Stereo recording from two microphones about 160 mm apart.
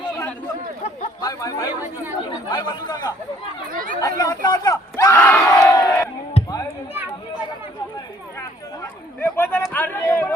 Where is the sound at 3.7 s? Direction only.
60° right (ahead or behind).